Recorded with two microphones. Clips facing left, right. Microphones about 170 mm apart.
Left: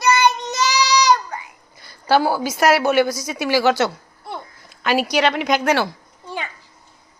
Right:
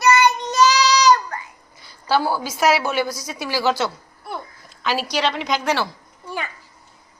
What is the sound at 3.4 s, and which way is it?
Speech, 70° left (ahead or behind).